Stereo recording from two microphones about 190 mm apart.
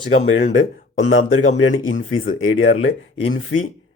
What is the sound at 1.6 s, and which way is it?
Speech, 90° left.